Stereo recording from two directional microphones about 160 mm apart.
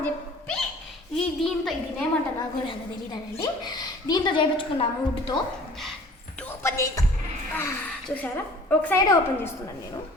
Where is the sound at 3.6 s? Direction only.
25° left (ahead or behind).